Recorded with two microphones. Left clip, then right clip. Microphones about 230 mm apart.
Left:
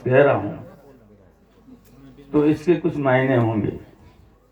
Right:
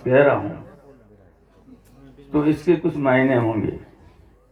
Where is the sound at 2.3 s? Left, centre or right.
Left.